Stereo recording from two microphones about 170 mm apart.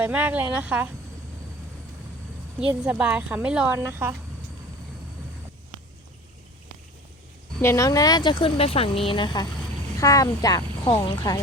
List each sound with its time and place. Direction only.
0.0 s speech: 10° right (ahead or behind)
2.6 s speech: 10° right (ahead or behind)
7.6 s speech: 15° left (ahead or behind)